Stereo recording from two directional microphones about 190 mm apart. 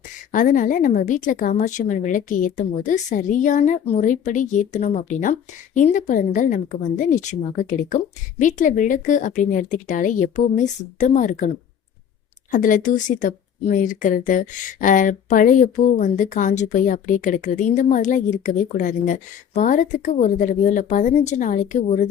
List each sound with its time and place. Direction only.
0.3 s a woman's voice: 45° left (ahead or behind)